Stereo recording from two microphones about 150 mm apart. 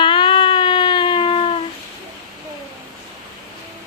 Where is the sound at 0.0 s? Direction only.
35° left (ahead or behind).